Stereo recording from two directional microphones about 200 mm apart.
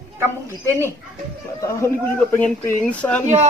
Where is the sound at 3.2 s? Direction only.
35° right (ahead or behind).